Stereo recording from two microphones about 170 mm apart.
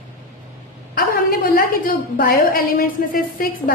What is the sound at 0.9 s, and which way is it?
A woman's voice, 60° left (ahead or behind).